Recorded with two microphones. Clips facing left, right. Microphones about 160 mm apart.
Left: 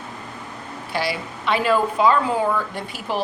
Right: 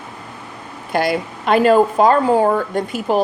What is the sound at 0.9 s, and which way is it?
A woman's voice, 50° right (ahead or behind).